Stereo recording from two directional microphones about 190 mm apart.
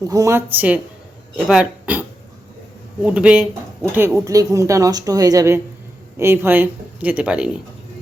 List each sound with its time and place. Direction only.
0.0 s a woman's voice: 15° right (ahead or behind)